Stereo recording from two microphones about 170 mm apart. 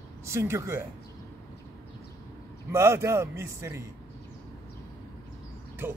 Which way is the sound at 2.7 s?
15° right (ahead or behind).